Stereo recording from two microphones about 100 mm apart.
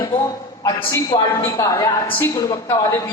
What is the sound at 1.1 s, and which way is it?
A woman's voice, 45° left (ahead or behind).